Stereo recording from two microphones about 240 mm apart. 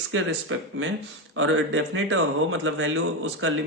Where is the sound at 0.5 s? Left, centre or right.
Right.